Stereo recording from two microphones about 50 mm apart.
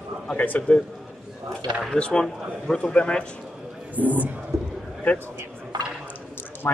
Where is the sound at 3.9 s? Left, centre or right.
Right.